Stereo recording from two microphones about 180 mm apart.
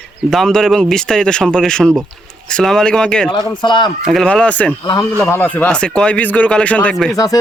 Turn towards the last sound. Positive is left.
turn(degrees=20)  # may be behind; listen again after turning